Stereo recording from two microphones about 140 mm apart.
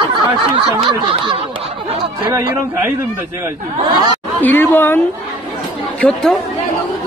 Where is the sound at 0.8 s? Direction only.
35° right (ahead or behind).